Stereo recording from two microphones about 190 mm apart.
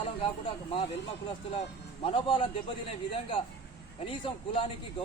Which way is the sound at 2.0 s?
30° left (ahead or behind).